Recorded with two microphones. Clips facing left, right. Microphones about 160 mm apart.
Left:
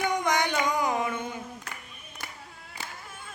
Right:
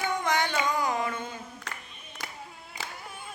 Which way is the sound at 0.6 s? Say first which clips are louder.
Left 1 dB; 20° left (ahead or behind).